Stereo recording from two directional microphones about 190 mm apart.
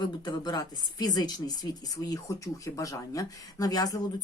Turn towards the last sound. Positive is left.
turn(degrees=20)  # may be behind; listen again after turning